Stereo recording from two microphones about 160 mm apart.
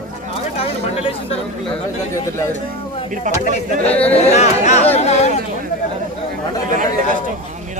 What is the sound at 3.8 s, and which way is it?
Speech, 40° left (ahead or behind).